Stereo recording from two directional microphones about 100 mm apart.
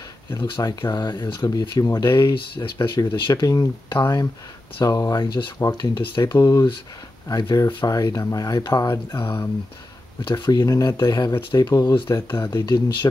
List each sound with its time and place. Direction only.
0.6 s speech: 45° left (ahead or behind)
11.8 s speech: 55° left (ahead or behind)
12.1 s speech: 25° left (ahead or behind)
12.5 s speech: 45° left (ahead or behind)